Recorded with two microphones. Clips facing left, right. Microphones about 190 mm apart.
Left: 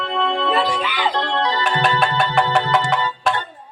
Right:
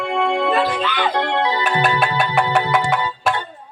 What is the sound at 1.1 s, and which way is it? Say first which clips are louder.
Music: right 2 dB; 10° right (ahead or behind).